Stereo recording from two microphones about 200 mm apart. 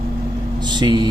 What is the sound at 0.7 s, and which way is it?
Speech, 20° right (ahead or behind).